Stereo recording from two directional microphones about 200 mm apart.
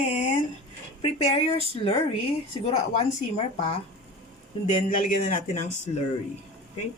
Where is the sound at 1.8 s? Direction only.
30° left (ahead or behind).